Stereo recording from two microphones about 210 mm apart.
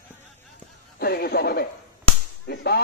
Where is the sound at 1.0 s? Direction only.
50° left (ahead or behind).